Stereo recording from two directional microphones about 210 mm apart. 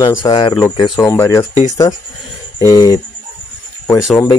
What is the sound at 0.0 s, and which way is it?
Speech, 20° left (ahead or behind).